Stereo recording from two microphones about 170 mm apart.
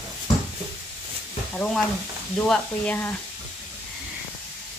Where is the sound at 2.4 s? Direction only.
10° left (ahead or behind).